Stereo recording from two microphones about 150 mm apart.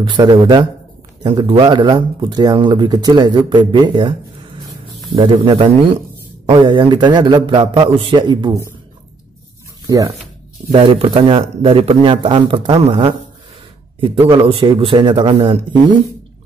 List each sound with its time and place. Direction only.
0.0 s speech: 30° right (ahead or behind)
5.1 s speech: 35° right (ahead or behind)
9.8 s speech: 20° right (ahead or behind)
10.7 s speech: 35° right (ahead or behind)